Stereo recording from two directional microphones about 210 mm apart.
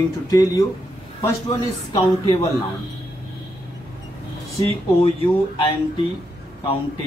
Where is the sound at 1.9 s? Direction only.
15° left (ahead or behind).